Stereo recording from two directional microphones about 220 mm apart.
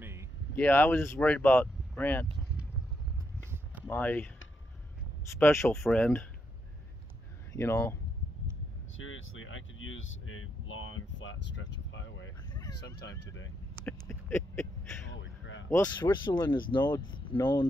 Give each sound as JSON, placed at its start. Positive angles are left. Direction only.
{"t": 0.0, "sound": "a sound", "side_deg": -10}
{"t": 0.6, "sound": "speech", "side_deg": 10}
{"t": 3.8, "sound": "speech", "side_deg": 10}
{"t": 5.4, "sound": "speech", "side_deg": 10}
{"t": 7.5, "sound": "speech", "side_deg": 10}
{"t": 8.9, "sound": "vehicle", "side_deg": 65}
{"t": 13.8, "sound": "a sound", "side_deg": 10}
{"t": 15.0, "sound": "a sound", "side_deg": 60}
{"t": 15.7, "sound": "speech", "side_deg": 15}